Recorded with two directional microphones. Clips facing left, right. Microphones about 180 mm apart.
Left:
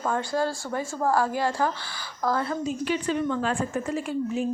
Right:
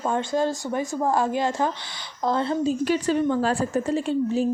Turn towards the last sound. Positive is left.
turn(degrees=-30)  # may be behind; listen again after turning